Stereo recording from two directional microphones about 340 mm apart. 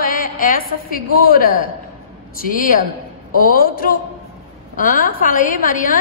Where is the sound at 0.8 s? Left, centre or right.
Left.